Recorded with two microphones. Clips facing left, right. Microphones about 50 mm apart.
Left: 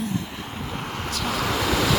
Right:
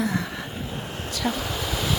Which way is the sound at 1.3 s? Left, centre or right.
Left.